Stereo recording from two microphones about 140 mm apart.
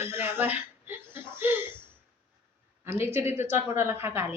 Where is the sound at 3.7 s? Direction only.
15° right (ahead or behind).